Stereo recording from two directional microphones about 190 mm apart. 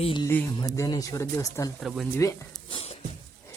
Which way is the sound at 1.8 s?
Centre (ahead or behind).